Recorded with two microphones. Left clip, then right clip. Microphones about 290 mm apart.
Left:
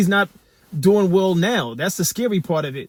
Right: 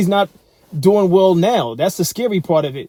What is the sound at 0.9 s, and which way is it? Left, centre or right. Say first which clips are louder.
Speech: right 5 dB; right.